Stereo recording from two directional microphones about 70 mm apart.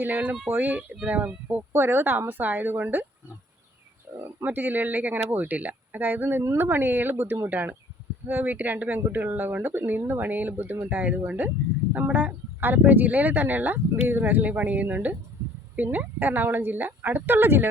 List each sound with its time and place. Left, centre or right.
0.0 s speech: right
4.4 s speech: right